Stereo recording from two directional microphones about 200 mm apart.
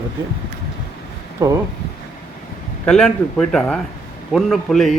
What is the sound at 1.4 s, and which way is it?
Speech, 15° right (ahead or behind).